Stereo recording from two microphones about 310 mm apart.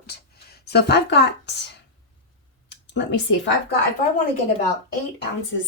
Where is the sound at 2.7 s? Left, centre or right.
Left.